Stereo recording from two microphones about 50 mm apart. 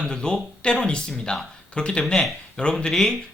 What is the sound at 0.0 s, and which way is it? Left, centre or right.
Speech, centre.